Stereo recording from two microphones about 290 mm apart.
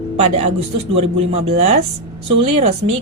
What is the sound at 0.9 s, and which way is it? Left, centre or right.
Speech, right.